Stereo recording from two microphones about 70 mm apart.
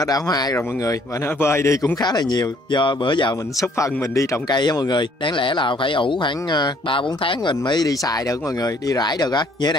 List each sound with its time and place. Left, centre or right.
0.0 s speech: left
1.4 s a man's voice: left
2.0 s speech: left
3.6 s speech: left
4.5 s speech: left
7.6 s speech: left
8.0 s speech: left